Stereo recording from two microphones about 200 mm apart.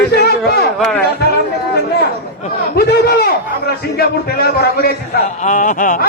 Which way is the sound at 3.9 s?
50° left (ahead or behind).